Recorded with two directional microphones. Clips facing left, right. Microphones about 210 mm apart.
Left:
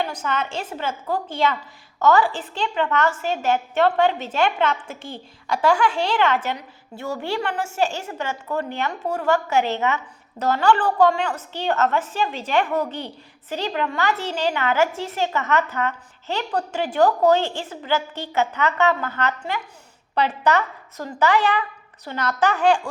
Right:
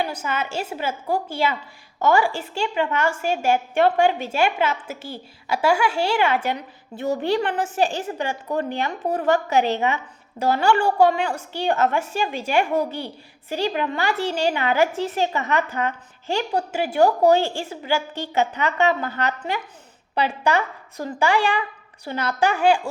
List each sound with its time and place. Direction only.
0.0 s a woman's voice: 10° right (ahead or behind)